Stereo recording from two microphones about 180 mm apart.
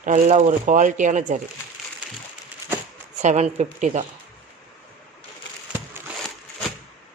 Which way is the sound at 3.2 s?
40° right (ahead or behind).